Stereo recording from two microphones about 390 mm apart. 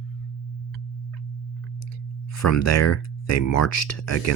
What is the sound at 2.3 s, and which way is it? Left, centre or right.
Speech, left.